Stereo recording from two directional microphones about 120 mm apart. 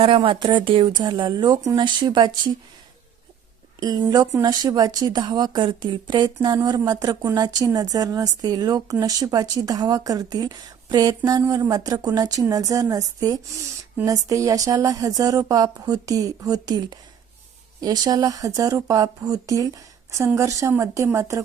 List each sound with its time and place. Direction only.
0.3 s a woman's voice: 40° right (ahead or behind)
3.8 s a woman's voice: 35° right (ahead or behind)